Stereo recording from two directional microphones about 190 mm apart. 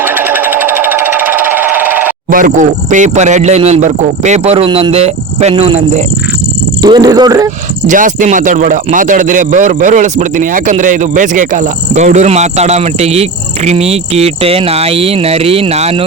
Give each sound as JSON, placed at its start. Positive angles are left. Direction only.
{"t": 0.0, "sound": "jackhammer", "side_deg": -10}
{"t": 2.3, "sound": "speech", "side_deg": -45}
{"t": 6.8, "sound": "speech", "side_deg": -20}
{"t": 7.9, "sound": "speech", "side_deg": -40}